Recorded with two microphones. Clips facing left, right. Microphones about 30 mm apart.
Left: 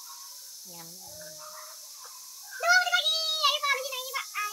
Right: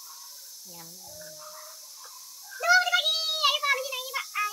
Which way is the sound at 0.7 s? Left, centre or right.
Centre.